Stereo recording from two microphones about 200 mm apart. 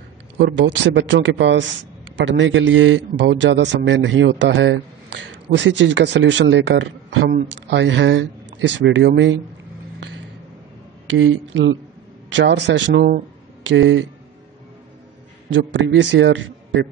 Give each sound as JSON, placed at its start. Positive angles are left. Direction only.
{"t": 0.4, "sound": "a man's voice", "side_deg": -60}
{"t": 11.1, "sound": "a man's voice", "side_deg": -70}
{"t": 15.5, "sound": "a man's voice", "side_deg": -70}